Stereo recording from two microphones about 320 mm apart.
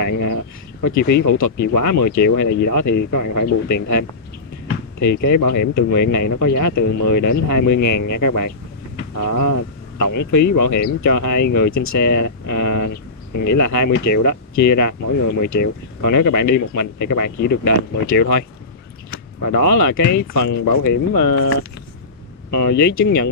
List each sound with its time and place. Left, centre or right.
0.0 s speech: left
18.1 s speech: left
19.4 s speech: left
22.5 s speech: left
22.8 s speech: left
23.0 s speech: left